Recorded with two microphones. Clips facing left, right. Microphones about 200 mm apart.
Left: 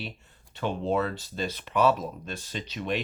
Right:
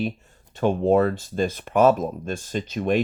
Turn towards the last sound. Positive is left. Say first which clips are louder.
# right 9 dB
turn(degrees=-50)  # may be behind; listen again after turning